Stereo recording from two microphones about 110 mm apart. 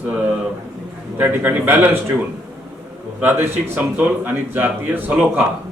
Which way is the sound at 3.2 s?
20° right (ahead or behind).